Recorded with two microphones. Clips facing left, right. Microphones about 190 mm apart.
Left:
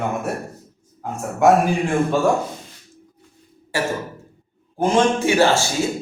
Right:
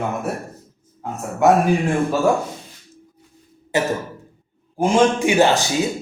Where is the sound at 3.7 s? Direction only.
20° right (ahead or behind).